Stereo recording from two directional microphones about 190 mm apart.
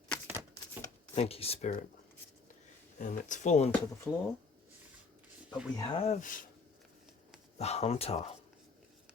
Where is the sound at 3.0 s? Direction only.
40° left (ahead or behind).